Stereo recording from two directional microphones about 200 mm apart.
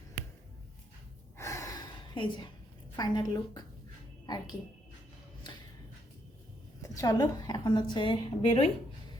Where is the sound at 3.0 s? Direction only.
20° left (ahead or behind).